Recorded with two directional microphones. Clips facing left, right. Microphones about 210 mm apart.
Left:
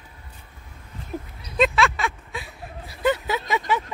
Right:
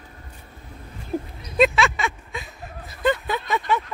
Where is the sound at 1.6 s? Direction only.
Centre (ahead or behind).